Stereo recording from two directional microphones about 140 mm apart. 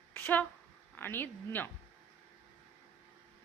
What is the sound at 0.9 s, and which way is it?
Speech, 15° left (ahead or behind).